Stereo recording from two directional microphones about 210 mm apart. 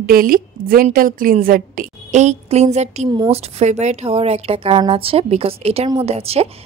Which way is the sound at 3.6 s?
30° right (ahead or behind).